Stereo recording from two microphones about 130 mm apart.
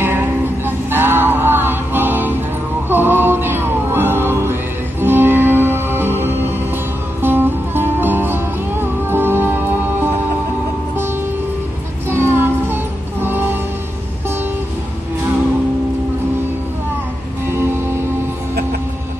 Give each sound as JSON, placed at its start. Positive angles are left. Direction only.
{"t": 0.0, "sound": "music", "side_deg": -15}
{"t": 12.1, "sound": "child singing", "side_deg": -15}
{"t": 13.2, "sound": "music", "side_deg": -15}
{"t": 17.5, "sound": "music", "side_deg": -20}